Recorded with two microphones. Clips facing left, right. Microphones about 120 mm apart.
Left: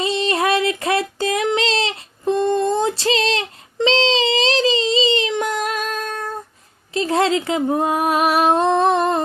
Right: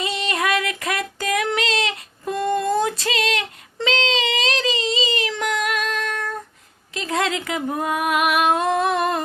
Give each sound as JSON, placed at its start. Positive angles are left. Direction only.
{"t": 0.0, "sound": "child singing", "side_deg": 30}
{"t": 3.8, "sound": "a sound", "side_deg": 30}
{"t": 6.9, "sound": "humming", "side_deg": 30}